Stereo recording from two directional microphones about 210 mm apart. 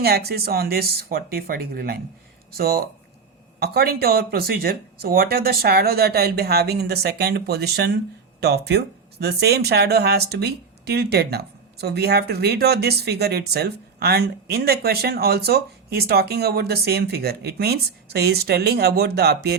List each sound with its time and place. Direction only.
0.0 s speech: 50° right (ahead or behind)